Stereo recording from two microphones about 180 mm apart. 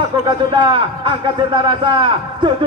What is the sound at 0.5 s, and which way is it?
A man's voice, 25° right (ahead or behind).